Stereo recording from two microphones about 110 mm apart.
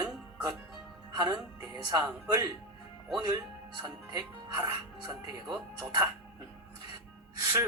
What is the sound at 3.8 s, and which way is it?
Speech, 40° right (ahead or behind).